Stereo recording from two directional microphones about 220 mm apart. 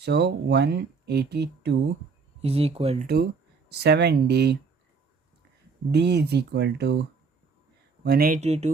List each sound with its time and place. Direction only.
0.0 s speech: 50° right (ahead or behind)
2.4 s speech: 25° right (ahead or behind)
3.7 s speech: 50° right (ahead or behind)
5.9 s speech: 50° right (ahead or behind)
8.0 s speech: 45° right (ahead or behind)